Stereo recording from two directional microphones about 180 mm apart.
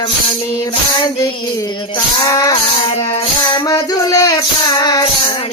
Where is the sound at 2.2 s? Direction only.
20° left (ahead or behind).